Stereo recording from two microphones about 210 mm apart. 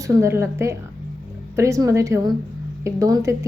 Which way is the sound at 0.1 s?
15° right (ahead or behind).